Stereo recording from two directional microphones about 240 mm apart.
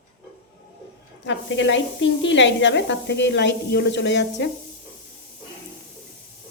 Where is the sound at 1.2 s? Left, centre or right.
Left.